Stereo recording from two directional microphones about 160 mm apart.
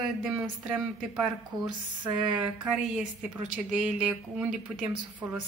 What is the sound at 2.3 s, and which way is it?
Speech, 5° right (ahead or behind).